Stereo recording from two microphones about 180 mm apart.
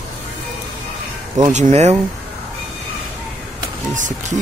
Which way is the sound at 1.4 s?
40° right (ahead or behind).